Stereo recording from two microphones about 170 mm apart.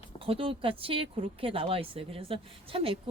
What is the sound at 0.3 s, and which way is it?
Speech, 30° right (ahead or behind).